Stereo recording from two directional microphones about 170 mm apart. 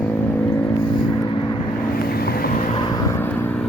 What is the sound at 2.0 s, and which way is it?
Vehicle, 65° left (ahead or behind).